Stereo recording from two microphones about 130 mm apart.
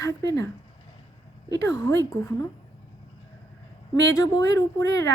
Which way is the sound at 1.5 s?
25° left (ahead or behind).